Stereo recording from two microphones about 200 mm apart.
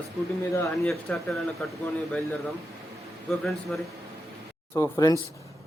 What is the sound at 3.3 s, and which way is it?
Speech, centre (ahead or behind).